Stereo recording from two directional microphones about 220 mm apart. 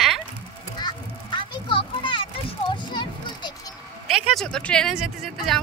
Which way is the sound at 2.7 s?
20° left (ahead or behind).